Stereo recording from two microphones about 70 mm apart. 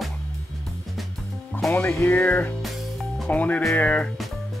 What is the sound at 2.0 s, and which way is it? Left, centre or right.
Speech, left.